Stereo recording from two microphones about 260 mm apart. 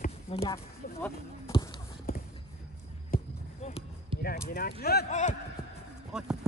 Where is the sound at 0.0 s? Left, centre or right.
Left.